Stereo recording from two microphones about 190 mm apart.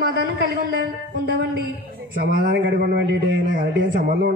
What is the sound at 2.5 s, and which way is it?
Speech, 65° right (ahead or behind).